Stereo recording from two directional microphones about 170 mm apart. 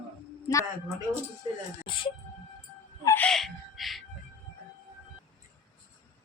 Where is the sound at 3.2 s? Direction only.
Centre (ahead or behind).